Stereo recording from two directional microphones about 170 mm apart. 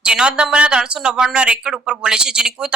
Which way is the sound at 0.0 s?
5° right (ahead or behind).